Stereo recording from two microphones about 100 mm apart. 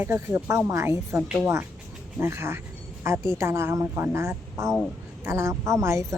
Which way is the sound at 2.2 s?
25° right (ahead or behind).